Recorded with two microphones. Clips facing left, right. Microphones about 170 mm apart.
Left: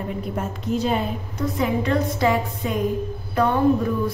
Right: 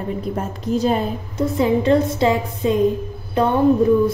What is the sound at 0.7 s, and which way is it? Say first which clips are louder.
Speech: right 4 dB; 40° right (ahead or behind).